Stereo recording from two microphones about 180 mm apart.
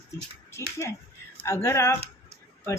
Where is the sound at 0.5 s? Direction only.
15° left (ahead or behind).